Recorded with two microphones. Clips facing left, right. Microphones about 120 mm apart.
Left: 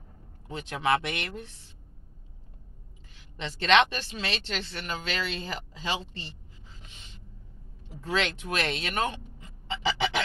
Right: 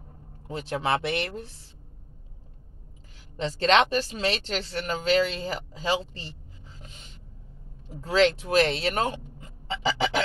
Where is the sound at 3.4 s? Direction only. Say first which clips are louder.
Right 2 dB; 35° right (ahead or behind).